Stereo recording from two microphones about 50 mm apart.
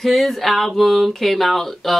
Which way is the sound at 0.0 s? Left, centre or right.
Centre.